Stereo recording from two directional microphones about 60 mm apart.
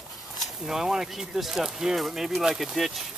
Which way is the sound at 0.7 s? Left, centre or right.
Centre.